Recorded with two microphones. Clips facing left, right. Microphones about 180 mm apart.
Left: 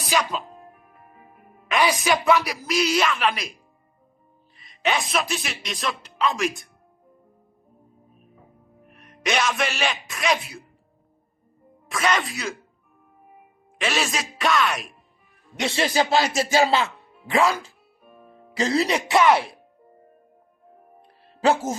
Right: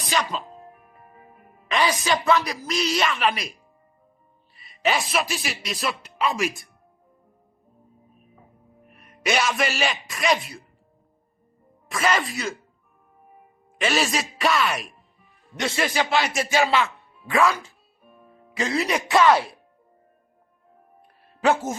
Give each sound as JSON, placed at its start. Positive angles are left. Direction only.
{"t": 0.1, "sound": "speech", "side_deg": 5}
{"t": 1.6, "sound": "music", "side_deg": 10}
{"t": 2.2, "sound": "speech", "side_deg": 10}
{"t": 4.5, "sound": "speech", "side_deg": 0}
{"t": 8.9, "sound": "speech", "side_deg": 0}
{"t": 11.9, "sound": "speech", "side_deg": 0}
{"t": 13.7, "sound": "speech", "side_deg": 0}
{"t": 15.5, "sound": "speech", "side_deg": 25}